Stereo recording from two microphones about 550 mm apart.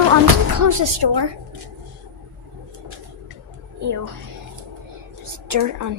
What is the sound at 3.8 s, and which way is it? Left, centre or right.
Speech, right.